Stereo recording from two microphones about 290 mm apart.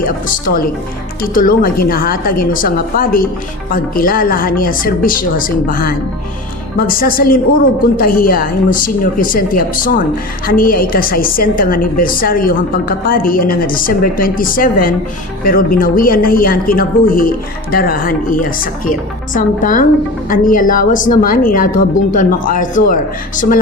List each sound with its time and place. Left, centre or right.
0.0 s a woman's voice: left